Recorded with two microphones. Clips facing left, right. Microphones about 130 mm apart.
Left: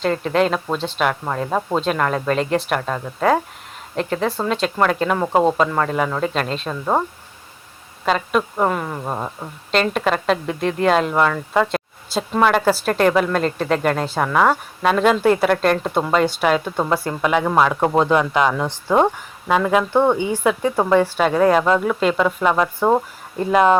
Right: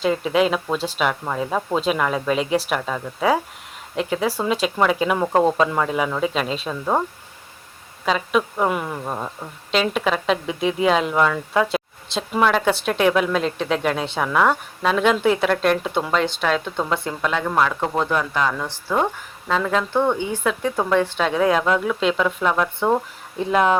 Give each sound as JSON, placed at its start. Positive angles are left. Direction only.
{"t": 0.0, "sound": "speech", "side_deg": -5}
{"t": 1.5, "sound": "speech", "side_deg": 5}
{"t": 1.8, "sound": "speech", "side_deg": -5}
{"t": 5.2, "sound": "speech", "side_deg": 10}
{"t": 5.5, "sound": "speech", "side_deg": -5}
{"t": 8.0, "sound": "speech", "side_deg": 0}
{"t": 9.0, "sound": "speech", "side_deg": 15}
{"t": 9.7, "sound": "speech", "side_deg": -5}
{"t": 17.2, "sound": "speech", "side_deg": 15}
{"t": 19.5, "sound": "speech", "side_deg": 10}